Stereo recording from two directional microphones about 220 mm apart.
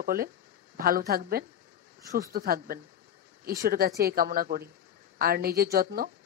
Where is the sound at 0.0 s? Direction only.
40° right (ahead or behind).